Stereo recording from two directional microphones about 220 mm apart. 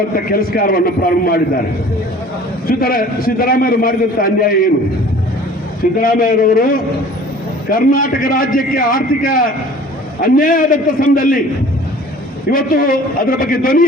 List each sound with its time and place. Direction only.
0.3 s a man's voice: 40° left (ahead or behind)
2.6 s a man's voice: 40° left (ahead or behind)
6.0 s a man's voice: 40° left (ahead or behind)
12.5 s a man's voice: 40° left (ahead or behind)